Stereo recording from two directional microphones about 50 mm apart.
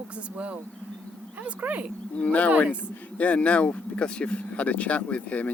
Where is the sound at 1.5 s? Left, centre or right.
Right.